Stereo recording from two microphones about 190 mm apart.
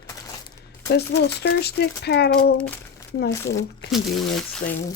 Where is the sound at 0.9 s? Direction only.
60° left (ahead or behind).